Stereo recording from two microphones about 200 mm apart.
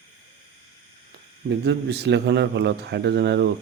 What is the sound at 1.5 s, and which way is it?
A man's voice, 60° right (ahead or behind).